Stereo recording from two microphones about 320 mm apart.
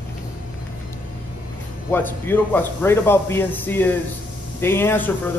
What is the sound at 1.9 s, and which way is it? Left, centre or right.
A man's voice, centre.